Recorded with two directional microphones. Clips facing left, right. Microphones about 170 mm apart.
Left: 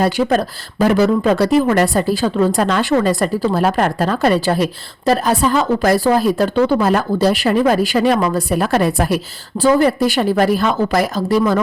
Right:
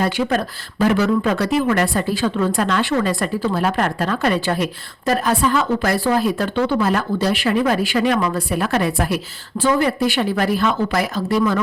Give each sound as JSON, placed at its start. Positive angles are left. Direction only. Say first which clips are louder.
{"t": 0.0, "sound": "speech", "louder": "left 4 dB", "side_deg": 35}